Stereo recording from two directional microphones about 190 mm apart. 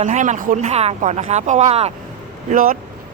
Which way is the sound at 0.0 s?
40° right (ahead or behind).